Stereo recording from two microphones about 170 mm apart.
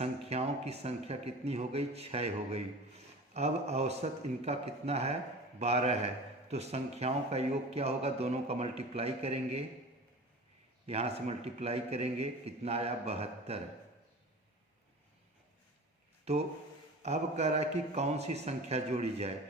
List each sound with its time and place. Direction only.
0.0 s a man's voice: 40° right (ahead or behind)
10.8 s a man's voice: 35° right (ahead or behind)
16.3 s a man's voice: 40° right (ahead or behind)